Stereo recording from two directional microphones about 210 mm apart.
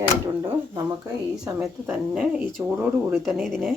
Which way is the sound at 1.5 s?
5° right (ahead or behind).